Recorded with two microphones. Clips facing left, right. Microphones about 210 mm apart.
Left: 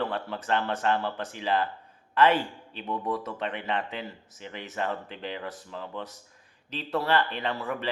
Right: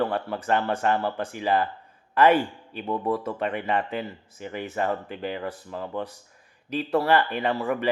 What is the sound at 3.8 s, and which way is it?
Speech, 50° right (ahead or behind).